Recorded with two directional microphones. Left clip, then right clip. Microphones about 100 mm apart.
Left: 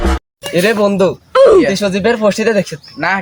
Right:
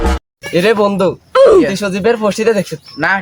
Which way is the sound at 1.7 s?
20° left (ahead or behind).